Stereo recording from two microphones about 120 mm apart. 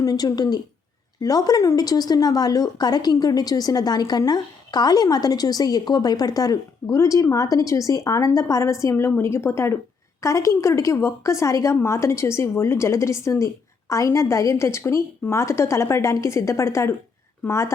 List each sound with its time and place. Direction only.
0.0 s a woman's voice: 30° left (ahead or behind)